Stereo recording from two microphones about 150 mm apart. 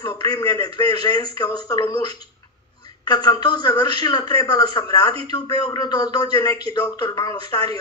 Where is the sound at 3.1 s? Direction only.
25° left (ahead or behind).